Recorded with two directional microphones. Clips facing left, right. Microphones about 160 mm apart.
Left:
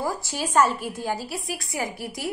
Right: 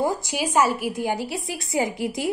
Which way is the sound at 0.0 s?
20° right (ahead or behind).